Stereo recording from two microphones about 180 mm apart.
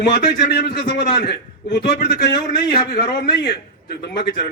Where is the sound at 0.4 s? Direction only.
65° left (ahead or behind).